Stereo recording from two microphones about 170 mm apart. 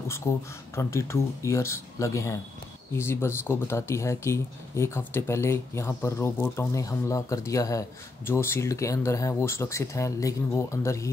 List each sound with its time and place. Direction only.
0.7 s speech: 15° left (ahead or behind)